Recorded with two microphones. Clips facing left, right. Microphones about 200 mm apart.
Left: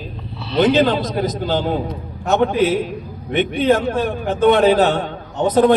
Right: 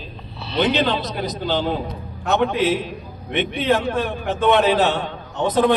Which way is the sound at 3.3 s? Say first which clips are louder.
Left 4 dB; 45° left (ahead or behind).